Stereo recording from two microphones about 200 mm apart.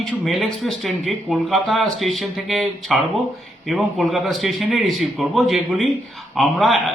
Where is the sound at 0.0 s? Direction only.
Centre (ahead or behind).